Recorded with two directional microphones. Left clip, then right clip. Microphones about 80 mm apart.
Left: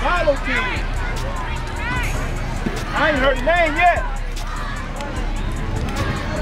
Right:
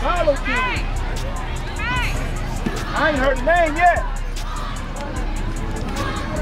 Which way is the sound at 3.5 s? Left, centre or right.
Left.